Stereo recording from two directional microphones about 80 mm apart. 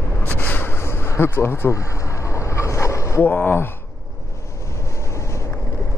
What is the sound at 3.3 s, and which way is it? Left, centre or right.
Speech, left.